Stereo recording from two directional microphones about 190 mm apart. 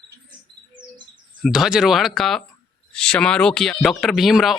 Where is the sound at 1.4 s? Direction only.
Centre (ahead or behind).